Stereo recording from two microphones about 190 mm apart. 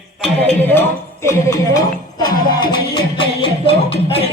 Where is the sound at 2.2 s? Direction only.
25° left (ahead or behind).